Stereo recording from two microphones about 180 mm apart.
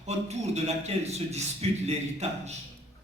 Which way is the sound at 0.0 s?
35° right (ahead or behind).